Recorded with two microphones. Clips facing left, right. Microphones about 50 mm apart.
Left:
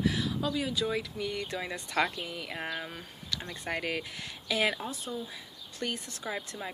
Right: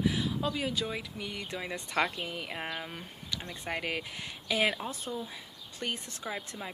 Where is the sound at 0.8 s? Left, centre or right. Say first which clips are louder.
Left 4 dB; centre.